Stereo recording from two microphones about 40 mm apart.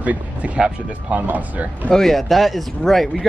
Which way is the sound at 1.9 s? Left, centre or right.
Centre.